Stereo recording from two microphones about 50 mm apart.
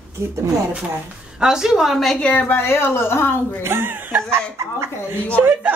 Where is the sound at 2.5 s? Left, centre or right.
Left.